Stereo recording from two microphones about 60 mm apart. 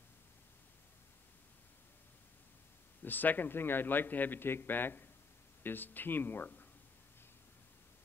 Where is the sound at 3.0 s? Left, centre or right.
Left.